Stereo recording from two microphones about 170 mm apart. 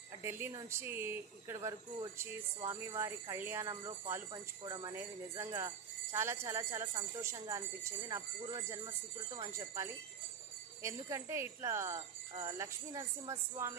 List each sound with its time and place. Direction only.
0.2 s speech: 15° right (ahead or behind)